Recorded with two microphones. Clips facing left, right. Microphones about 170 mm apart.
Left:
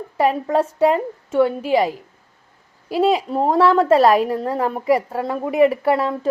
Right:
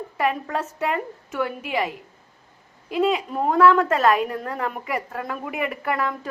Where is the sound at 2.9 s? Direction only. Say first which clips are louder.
Left 4 dB; 35° left (ahead or behind).